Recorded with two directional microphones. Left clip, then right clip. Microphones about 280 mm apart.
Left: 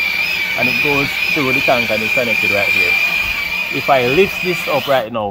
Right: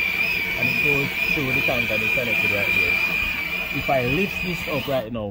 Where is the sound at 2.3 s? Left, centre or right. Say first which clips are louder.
Left 6 dB; centre.